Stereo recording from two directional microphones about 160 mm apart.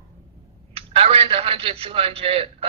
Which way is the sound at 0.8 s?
35° right (ahead or behind).